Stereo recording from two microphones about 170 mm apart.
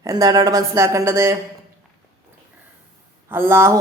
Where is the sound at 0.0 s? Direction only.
20° right (ahead or behind).